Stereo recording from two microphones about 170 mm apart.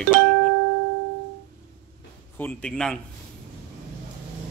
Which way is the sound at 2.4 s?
10° left (ahead or behind).